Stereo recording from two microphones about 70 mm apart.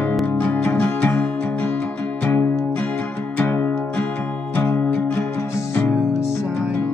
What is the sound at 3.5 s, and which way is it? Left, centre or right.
Music, left.